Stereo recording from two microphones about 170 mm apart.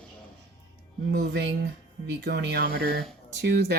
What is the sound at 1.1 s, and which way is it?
Speech, 90° right.